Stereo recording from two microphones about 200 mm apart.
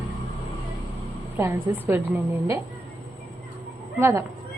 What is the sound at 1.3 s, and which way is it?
Speech, 10° right (ahead or behind).